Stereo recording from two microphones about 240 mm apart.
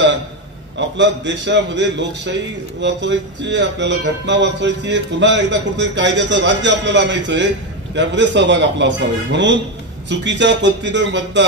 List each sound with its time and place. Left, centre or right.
0.7 s a man's voice: right